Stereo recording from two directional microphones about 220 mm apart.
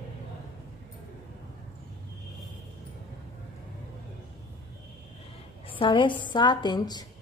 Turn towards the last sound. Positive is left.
turn(degrees=20)  # may be behind; listen again after turning